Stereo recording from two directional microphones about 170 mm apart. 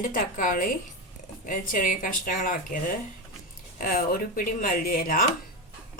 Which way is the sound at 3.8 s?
55° left (ahead or behind).